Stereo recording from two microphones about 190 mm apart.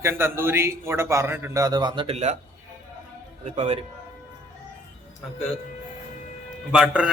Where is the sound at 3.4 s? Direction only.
35° right (ahead or behind).